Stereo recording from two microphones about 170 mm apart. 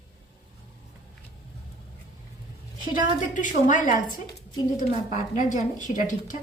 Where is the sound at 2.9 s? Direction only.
50° left (ahead or behind).